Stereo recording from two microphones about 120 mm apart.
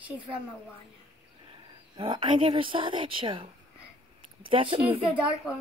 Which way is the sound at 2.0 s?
40° right (ahead or behind).